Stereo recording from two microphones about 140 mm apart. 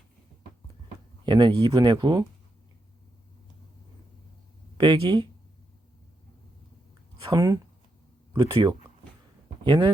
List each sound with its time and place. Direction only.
1.2 s speech: 35° right (ahead or behind)
4.8 s speech: 35° right (ahead or behind)
7.2 s speech: 35° right (ahead or behind)